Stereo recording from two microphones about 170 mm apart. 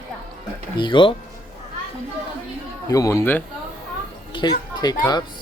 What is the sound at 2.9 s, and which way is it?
Speech, 20° left (ahead or behind).